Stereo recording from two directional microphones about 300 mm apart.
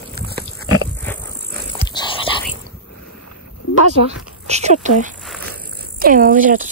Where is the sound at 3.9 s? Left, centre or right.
Right.